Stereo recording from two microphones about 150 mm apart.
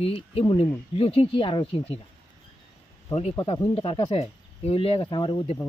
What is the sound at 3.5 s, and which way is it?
Speech, 40° left (ahead or behind).